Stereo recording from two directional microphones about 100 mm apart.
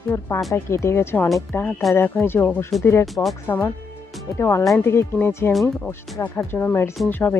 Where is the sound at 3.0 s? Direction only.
Centre (ahead or behind).